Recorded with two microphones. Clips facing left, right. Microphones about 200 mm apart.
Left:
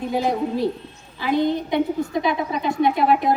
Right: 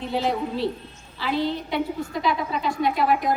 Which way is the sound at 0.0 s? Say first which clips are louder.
Left 3 dB; 10° left (ahead or behind).